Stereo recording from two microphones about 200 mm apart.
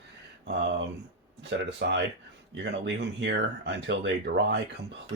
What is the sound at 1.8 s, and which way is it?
Speech, 55° right (ahead or behind).